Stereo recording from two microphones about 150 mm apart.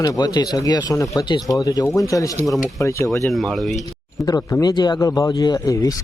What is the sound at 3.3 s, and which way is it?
Speech, centre (ahead or behind).